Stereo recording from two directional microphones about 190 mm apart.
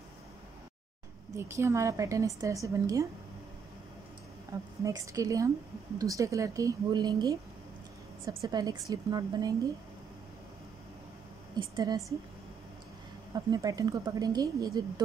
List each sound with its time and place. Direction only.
1.3 s a woman's voice: 15° right (ahead or behind)
4.5 s a woman's voice: 15° right (ahead or behind)
11.5 s speech: 20° right (ahead or behind)
13.3 s speech: 20° right (ahead or behind)